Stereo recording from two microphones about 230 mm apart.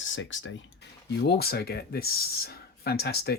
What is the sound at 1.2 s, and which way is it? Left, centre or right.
Speech, left.